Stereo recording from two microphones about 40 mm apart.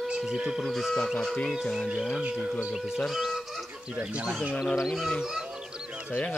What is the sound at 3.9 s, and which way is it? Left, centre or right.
Speech, right.